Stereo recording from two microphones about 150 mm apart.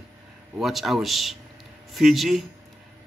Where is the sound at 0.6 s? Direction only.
Centre (ahead or behind).